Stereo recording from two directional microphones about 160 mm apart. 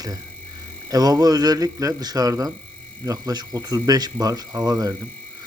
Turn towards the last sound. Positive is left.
turn(degrees=-25)  # may be behind; listen again after turning